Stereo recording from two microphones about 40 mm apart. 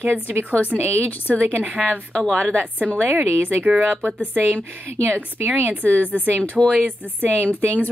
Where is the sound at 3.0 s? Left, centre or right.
Right.